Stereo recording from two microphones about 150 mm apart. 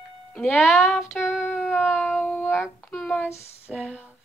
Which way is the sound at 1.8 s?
Centre (ahead or behind).